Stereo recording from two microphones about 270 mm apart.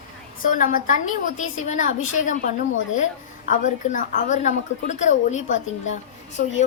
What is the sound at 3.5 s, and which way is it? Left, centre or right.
A woman's voice, left.